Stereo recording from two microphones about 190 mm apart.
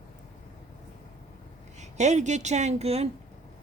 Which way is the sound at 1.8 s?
40° right (ahead or behind).